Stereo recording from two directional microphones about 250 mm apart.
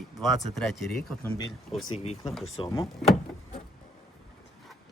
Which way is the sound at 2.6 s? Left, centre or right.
Left.